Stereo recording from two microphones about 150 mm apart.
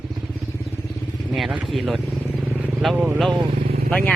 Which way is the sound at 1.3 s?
Centre (ahead or behind).